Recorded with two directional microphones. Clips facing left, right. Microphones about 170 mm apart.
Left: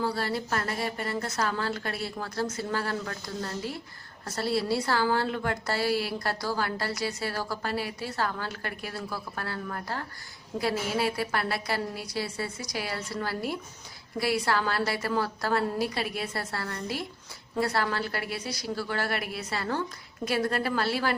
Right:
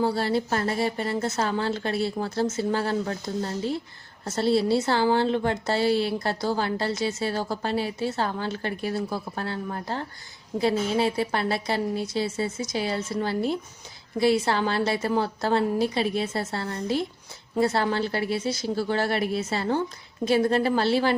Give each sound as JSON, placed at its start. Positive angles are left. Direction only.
{"t": 0.0, "sound": "a woman's voice", "side_deg": -25}